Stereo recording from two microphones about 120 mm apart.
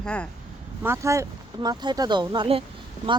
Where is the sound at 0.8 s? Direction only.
25° right (ahead or behind).